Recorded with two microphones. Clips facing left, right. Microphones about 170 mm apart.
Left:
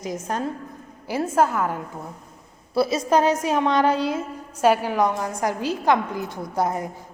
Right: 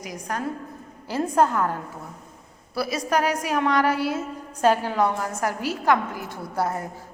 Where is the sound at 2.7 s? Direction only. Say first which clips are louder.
Left 5 dB; 25° left (ahead or behind).